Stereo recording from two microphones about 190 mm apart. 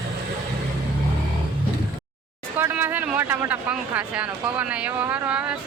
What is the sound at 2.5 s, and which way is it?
Speech, 10° right (ahead or behind).